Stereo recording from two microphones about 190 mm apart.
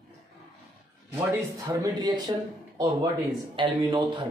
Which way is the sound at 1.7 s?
20° right (ahead or behind).